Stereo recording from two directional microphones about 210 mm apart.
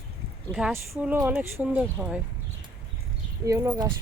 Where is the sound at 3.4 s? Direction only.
15° right (ahead or behind).